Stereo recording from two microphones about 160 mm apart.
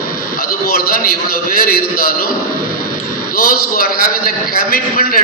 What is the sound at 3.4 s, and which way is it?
A man's voice, 65° left (ahead or behind).